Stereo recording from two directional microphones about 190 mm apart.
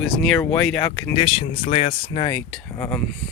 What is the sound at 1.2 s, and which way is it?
Speech, 30° left (ahead or behind).